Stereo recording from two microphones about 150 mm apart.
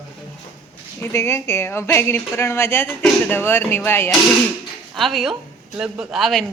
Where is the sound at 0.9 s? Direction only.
15° left (ahead or behind).